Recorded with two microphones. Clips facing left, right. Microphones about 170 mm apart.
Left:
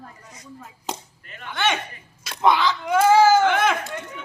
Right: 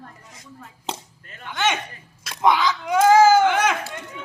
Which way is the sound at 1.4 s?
15° right (ahead or behind).